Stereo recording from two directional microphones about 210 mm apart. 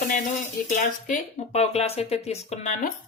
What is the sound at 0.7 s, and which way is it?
Speech, 35° left (ahead or behind).